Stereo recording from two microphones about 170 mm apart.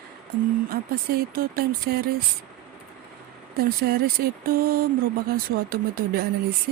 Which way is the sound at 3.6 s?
65° right (ahead or behind).